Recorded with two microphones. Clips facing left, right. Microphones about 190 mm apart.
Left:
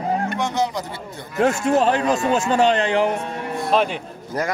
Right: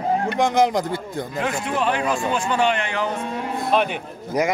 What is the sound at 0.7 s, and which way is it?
Speech, 45° right (ahead or behind).